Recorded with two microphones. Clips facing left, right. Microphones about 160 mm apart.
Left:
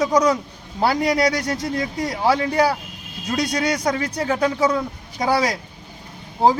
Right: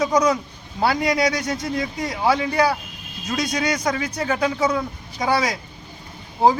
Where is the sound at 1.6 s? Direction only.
35° left (ahead or behind).